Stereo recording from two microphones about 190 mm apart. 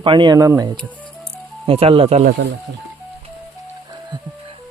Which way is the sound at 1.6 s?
30° right (ahead or behind).